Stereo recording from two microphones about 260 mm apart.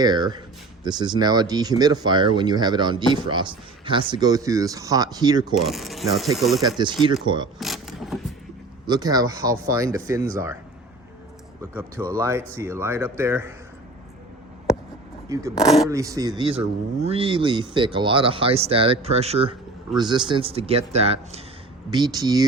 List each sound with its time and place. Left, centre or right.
0.0 s speech: centre
5.5 s speech: centre
6.6 s speech: centre
7.6 s vehicle: centre
8.9 s speech: centre
11.6 s speech: centre
15.3 s speech: centre
15.6 s speech: centre
15.9 s speech: centre